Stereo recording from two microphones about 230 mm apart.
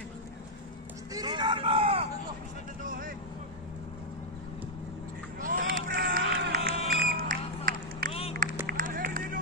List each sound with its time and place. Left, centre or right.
1.1 s hubbub: centre
2.8 s vehicle: right
5.4 s run: right
6.9 s a sound: right
8.4 s run: right